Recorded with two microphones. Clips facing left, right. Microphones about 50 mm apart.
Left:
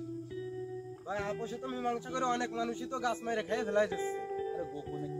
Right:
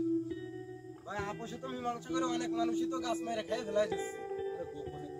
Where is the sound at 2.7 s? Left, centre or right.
Left.